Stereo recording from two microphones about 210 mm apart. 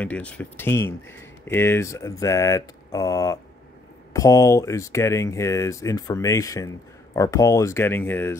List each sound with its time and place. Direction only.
0.0 s speech: 5° left (ahead or behind)